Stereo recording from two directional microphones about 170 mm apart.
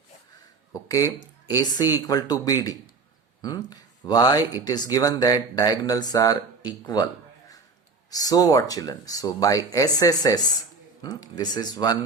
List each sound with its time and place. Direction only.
0.7 s speech: 20° left (ahead or behind)
8.1 s speech: 20° left (ahead or behind)